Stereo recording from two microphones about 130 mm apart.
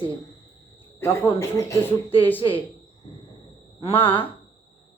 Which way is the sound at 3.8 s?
45° left (ahead or behind).